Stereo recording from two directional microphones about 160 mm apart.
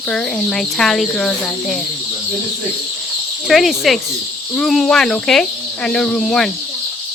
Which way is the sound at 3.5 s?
Centre (ahead or behind).